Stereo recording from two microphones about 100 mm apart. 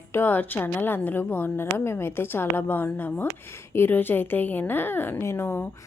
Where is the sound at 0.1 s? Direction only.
20° left (ahead or behind).